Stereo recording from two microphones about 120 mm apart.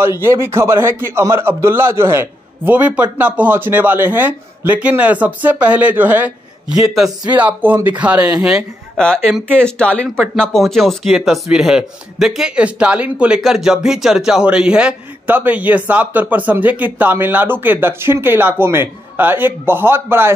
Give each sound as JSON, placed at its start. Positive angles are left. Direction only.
{"t": 0.0, "sound": "a man's voice", "side_deg": -20}